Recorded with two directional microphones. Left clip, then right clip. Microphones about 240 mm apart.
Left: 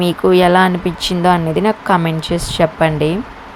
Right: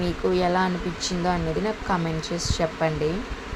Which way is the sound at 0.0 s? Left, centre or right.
Left.